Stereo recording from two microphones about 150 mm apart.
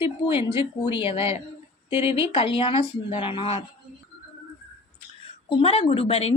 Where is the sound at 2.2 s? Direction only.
40° left (ahead or behind).